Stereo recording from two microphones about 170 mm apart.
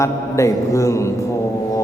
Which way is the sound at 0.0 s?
15° left (ahead or behind).